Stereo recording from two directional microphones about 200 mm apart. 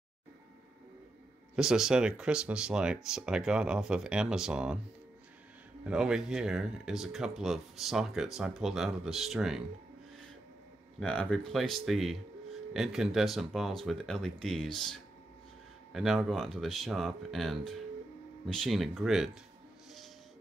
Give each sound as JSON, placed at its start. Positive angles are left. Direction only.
{"t": 1.5, "sound": "speech", "side_deg": -5}
{"t": 5.9, "sound": "speech", "side_deg": -5}
{"t": 11.0, "sound": "speech", "side_deg": 5}